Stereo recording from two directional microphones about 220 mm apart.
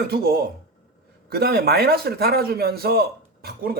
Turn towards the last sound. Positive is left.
turn(degrees=-45)  # may be behind; listen again after turning